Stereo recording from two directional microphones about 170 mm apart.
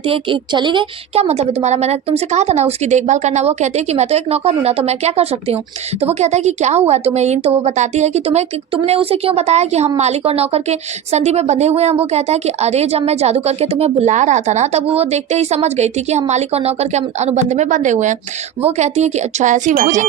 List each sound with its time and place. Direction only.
0.0 s a woman's voice: 30° right (ahead or behind); by 20.1 s 50° right (ahead or behind)